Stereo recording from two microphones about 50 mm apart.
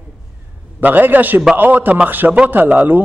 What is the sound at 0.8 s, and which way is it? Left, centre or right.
Speech, right.